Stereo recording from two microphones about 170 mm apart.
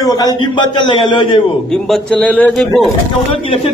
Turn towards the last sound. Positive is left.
turn(degrees=35)  # may be behind; listen again after turning